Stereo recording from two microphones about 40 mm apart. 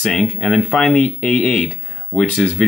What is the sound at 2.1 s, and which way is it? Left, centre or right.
Speech, left.